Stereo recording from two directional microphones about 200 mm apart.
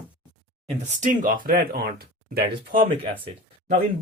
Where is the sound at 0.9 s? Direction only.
40° right (ahead or behind).